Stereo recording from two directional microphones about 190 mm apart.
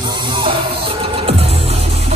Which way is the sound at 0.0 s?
25° right (ahead or behind).